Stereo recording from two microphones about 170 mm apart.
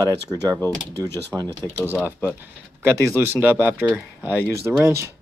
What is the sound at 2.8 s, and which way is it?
Speech, 15° right (ahead or behind).